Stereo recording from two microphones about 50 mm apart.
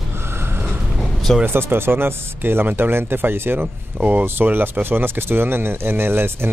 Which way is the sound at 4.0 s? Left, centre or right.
Right.